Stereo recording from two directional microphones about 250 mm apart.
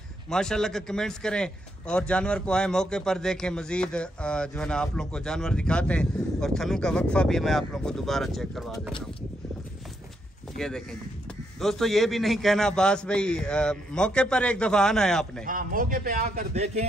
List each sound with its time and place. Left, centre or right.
0.3 s speech: centre
10.6 s speech: centre
15.4 s a man's voice: right